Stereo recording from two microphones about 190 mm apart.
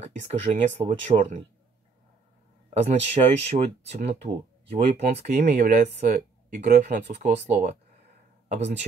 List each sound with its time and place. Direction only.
0.0 s speech: 35° right (ahead or behind)
2.7 s speech: 35° right (ahead or behind); by 7.1 s 60° right (ahead or behind)
7.2 s speech: 35° right (ahead or behind)